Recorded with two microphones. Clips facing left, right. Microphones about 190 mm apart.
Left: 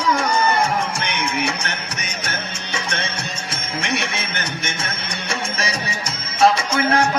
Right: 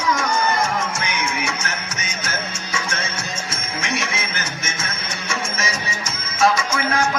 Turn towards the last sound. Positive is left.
turn(degrees=30)  # may be behind; listen again after turning